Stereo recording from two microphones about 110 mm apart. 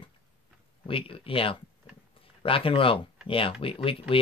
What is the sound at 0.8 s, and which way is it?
Speech, 55° left (ahead or behind).